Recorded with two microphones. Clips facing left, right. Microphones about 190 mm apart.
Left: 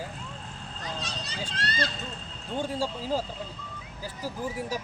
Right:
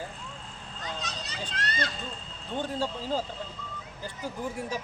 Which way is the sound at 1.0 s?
30° left (ahead or behind).